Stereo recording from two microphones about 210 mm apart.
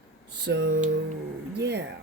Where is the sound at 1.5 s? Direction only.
55° right (ahead or behind).